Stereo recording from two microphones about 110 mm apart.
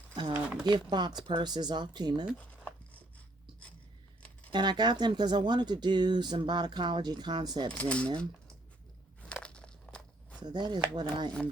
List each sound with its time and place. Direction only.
0.3 s speech: 10° right (ahead or behind)
0.6 s speech: 40° right (ahead or behind)
4.5 s speech: 40° right (ahead or behind)
7.7 s speech: 10° left (ahead or behind)
9.3 s a sound: 10° left (ahead or behind)
10.4 s speech: 40° right (ahead or behind)